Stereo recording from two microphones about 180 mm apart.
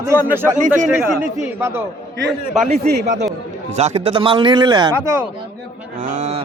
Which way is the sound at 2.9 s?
65° right (ahead or behind).